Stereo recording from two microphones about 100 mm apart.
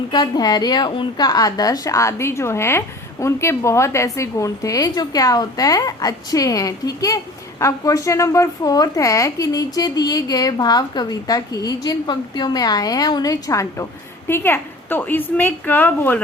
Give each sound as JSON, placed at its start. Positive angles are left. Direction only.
{"t": 0.1, "sound": "a woman's voice", "side_deg": 45}